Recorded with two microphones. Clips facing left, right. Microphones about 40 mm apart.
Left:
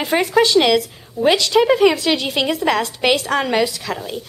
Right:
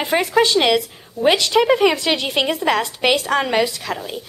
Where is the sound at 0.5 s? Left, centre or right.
Centre.